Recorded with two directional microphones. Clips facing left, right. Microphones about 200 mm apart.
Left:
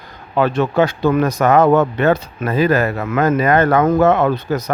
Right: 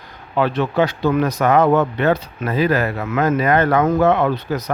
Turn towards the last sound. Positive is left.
turn(degrees=45)  # may be behind; listen again after turning